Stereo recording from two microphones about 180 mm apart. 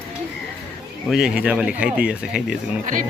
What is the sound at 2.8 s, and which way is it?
Speech, 45° right (ahead or behind).